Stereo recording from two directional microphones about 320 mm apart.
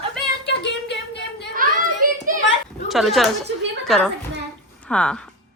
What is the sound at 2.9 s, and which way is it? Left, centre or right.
A woman's voice, centre.